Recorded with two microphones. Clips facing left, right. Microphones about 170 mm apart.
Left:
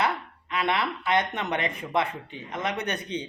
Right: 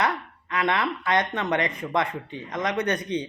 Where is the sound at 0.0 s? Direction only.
25° left (ahead or behind).